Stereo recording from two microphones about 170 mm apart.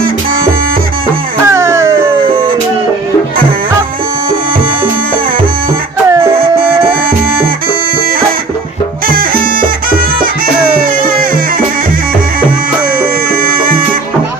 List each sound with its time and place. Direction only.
1.5 s music: 20° right (ahead or behind)
9.0 s music: 60° right (ahead or behind)
10.8 s music: 55° right (ahead or behind)
13.0 s music: 55° right (ahead or behind)